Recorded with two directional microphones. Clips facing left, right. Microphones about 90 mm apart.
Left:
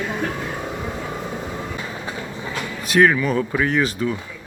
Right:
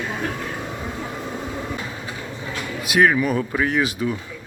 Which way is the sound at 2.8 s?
5° right (ahead or behind).